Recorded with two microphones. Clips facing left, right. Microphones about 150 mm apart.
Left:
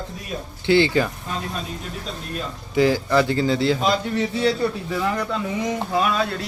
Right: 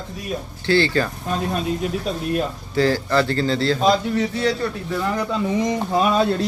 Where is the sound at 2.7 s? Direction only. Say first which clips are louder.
Left 1 dB; 15° left (ahead or behind).